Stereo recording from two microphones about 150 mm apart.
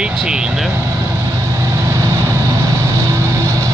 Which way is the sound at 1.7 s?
20° right (ahead or behind).